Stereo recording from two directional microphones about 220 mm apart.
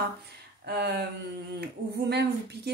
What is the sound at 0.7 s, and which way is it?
Speech, 50° right (ahead or behind).